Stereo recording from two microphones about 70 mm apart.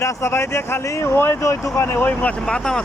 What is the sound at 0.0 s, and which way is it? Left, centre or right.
Speech, left.